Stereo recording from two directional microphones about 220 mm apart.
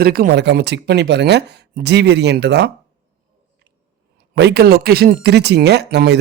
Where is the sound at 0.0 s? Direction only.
45° right (ahead or behind).